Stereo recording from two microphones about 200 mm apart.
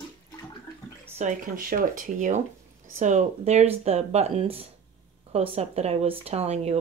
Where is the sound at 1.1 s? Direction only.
40° right (ahead or behind).